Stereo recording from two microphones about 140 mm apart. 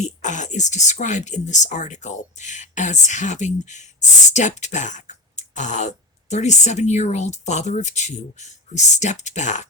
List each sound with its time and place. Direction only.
0.0 s speech: 60° left (ahead or behind)